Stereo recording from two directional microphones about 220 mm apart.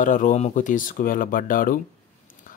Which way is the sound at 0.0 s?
35° left (ahead or behind).